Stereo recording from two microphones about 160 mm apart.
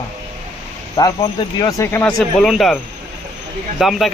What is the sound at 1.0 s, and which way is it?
Speech, 25° left (ahead or behind).